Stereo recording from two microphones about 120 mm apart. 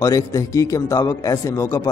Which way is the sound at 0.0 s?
30° left (ahead or behind).